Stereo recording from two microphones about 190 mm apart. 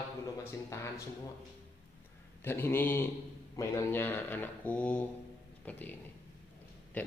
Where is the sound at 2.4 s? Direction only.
10° left (ahead or behind).